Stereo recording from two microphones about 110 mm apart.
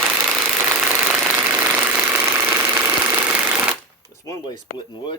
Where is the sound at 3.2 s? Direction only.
15° right (ahead or behind).